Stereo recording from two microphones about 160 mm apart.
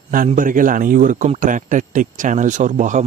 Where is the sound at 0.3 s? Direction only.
55° right (ahead or behind).